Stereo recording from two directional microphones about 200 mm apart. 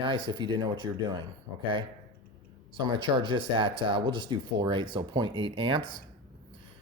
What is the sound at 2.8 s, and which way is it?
Speech, 25° right (ahead or behind).